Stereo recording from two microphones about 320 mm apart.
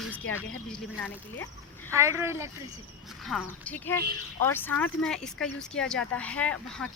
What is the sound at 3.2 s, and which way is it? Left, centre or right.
Speech, centre.